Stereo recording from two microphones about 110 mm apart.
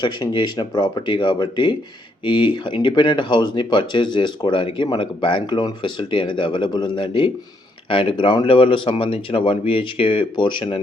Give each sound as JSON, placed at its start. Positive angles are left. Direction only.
{"t": 0.0, "sound": "speech", "side_deg": 45}